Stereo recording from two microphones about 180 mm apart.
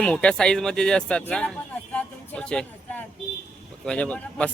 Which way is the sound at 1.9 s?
5° left (ahead or behind).